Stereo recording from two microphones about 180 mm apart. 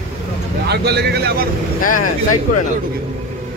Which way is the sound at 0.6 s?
65° right (ahead or behind).